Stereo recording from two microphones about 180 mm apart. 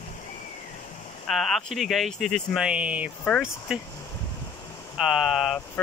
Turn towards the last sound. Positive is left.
turn(degrees=0)  # may be behind; listen again after turning